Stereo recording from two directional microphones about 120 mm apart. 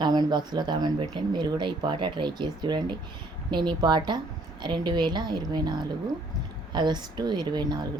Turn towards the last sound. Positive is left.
turn(degrees=-35)  # may be behind; listen again after turning